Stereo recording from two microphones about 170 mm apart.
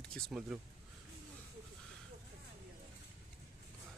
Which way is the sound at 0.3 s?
5° right (ahead or behind).